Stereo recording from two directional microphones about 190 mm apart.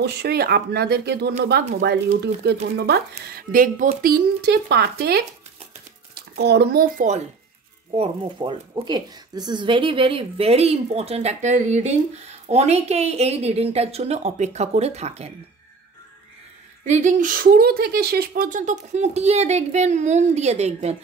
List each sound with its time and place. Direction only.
0.0 s speech: 60° right (ahead or behind)
7.9 s a woman's voice: 30° right (ahead or behind)
16.8 s a woman's voice: 40° right (ahead or behind)